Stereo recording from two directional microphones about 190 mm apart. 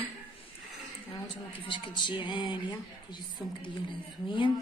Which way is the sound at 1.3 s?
25° left (ahead or behind).